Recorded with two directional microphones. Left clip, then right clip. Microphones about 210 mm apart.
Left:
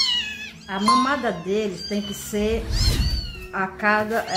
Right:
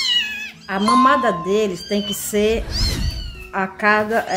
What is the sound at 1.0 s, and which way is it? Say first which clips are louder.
Speech: right 8 dB; 35° right (ahead or behind).